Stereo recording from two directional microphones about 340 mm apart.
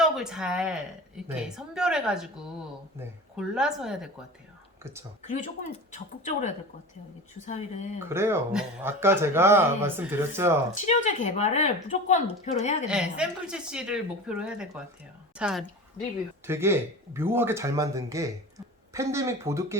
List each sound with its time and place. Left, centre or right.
0.0 s a woman's voice: centre
7.4 s a woman's voice: centre
7.9 s speech: centre
10.8 s a woman's voice: left
12.9 s a woman's voice: centre